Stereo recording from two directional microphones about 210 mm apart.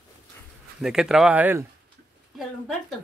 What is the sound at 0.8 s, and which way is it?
Speech, 5° right (ahead or behind).